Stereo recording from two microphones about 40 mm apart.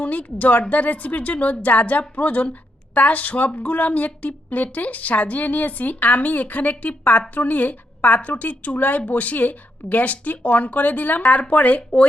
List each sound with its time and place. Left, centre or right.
0.0 s a woman's voice: left